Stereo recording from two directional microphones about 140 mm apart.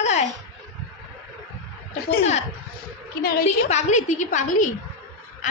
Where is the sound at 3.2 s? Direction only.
90° left.